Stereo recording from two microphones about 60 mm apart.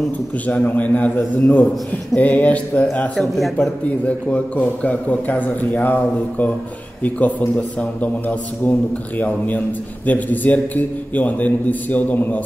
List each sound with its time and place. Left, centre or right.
0.5 s a man's voice: left
3.2 s a man's voice: centre
4.0 s a man's voice: left
10.0 s a man's voice: left